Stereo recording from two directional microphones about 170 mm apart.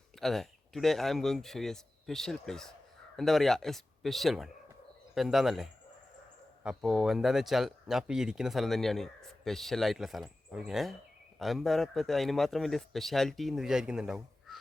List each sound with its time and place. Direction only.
0.2 s speech: centre (ahead or behind)